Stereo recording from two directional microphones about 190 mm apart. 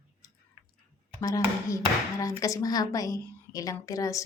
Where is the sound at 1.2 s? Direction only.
15° left (ahead or behind).